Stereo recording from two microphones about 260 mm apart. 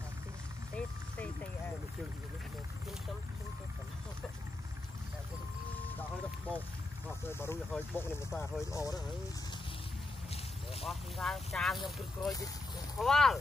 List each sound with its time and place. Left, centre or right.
0.7 s vehicle: centre
7.2 s speech: centre
10.3 s vehicle: left
10.9 s speech: centre
12.2 s speech: centre
13.0 s speech: centre